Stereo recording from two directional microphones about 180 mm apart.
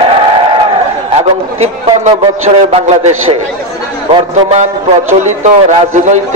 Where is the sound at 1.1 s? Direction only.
35° right (ahead or behind).